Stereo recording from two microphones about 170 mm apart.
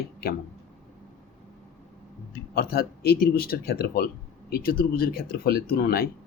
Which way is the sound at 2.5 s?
65° left (ahead or behind).